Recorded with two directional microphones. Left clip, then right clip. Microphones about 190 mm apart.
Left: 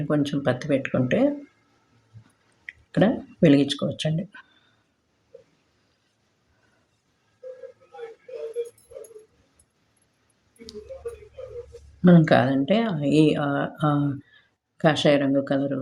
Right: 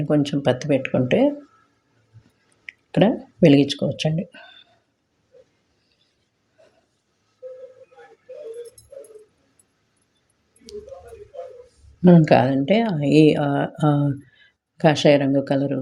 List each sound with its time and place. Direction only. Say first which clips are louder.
0.1 s speech: right 4 dB; 20° right (ahead or behind)
2.6 s speech: right 3 dB; 20° right (ahead or behind)
12.0 s speech: right 3 dB; 25° right (ahead or behind)